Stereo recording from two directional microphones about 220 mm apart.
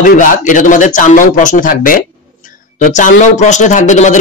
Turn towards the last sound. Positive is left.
turn(degrees=35)  # may be behind; listen again after turning